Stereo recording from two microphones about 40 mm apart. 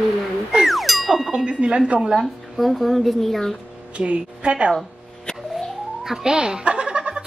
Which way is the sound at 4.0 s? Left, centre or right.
Right.